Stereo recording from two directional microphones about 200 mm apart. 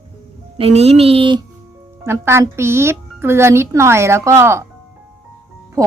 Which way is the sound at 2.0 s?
10° right (ahead or behind).